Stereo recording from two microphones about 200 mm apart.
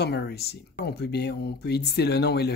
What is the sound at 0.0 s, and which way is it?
Speech, 55° left (ahead or behind).